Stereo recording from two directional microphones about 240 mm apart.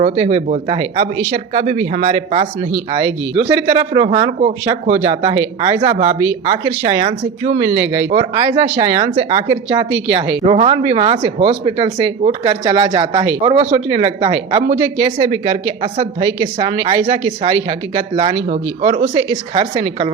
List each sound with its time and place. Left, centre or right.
0.0 s speech: right
3.9 s speech: right
7.8 s speech: centre
8.1 s speech: right